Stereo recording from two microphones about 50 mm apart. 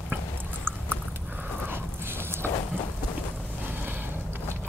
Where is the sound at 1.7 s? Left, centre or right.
Right.